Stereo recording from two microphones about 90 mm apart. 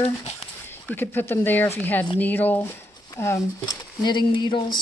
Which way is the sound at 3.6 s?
55° left (ahead or behind).